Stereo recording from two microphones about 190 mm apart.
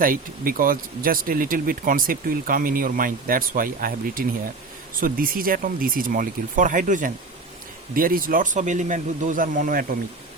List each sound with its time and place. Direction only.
0.0 s speech: 50° right (ahead or behind)